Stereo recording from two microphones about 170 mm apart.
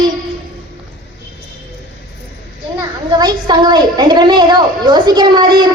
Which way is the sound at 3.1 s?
25° right (ahead or behind).